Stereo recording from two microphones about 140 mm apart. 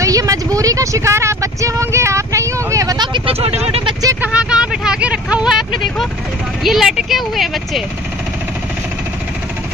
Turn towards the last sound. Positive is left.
turn(degrees=0)  # may be behind; listen again after turning